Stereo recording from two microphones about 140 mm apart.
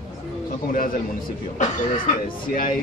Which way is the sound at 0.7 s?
80° left.